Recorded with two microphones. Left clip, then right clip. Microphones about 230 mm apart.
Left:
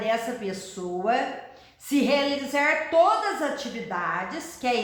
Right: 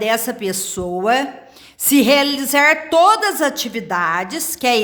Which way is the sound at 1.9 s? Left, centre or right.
Right.